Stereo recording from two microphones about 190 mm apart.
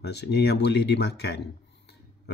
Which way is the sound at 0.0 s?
60° left (ahead or behind).